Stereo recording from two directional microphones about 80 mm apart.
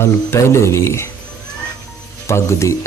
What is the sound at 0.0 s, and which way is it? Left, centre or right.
Speech, left.